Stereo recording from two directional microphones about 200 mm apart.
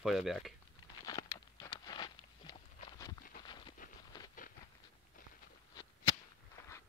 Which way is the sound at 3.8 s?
40° left (ahead or behind).